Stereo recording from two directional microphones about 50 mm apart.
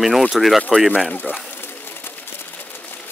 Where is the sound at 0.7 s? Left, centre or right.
Centre.